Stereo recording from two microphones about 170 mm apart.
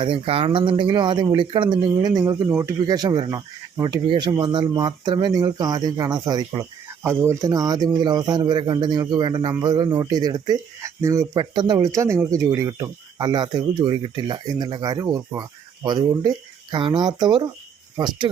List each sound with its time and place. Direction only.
0.0 s speech: 30° right (ahead or behind)
17.9 s cricket: 25° right (ahead or behind)